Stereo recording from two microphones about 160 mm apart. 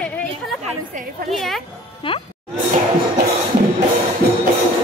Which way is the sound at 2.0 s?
35° left (ahead or behind).